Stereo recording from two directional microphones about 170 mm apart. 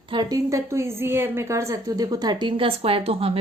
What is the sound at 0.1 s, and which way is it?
A woman's voice, 25° right (ahead or behind).